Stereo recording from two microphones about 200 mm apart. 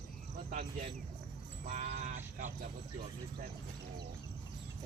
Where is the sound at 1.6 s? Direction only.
35° right (ahead or behind).